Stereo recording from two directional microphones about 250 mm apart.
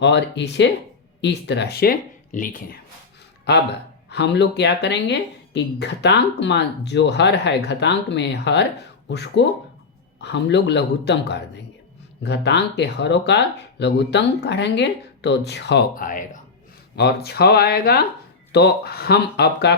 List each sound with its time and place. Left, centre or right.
0.0 s speech: left
4.1 s speech: left